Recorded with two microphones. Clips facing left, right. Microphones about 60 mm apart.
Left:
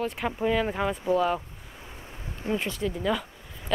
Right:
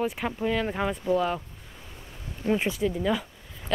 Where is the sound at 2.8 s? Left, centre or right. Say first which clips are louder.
Right 1 dB; centre.